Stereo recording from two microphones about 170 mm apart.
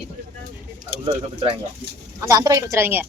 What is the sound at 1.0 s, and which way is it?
A woman's voice, 30° right (ahead or behind).